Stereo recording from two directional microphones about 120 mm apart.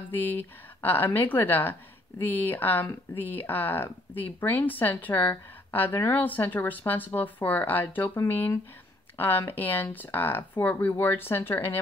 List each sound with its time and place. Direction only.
0.1 s speech: 15° left (ahead or behind)